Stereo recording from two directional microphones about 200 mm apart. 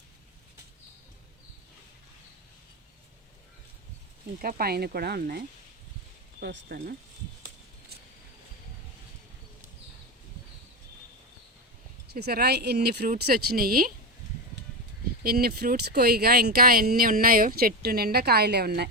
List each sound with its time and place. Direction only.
4.4 s speech: 45° right (ahead or behind)
6.4 s speech: 50° right (ahead or behind)
12.1 s speech: 50° right (ahead or behind)
15.2 s speech: 50° right (ahead or behind)